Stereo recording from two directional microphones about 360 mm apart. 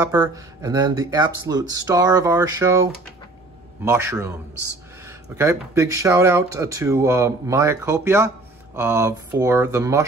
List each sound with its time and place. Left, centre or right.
0.0 s speech: centre
5.3 s speech: centre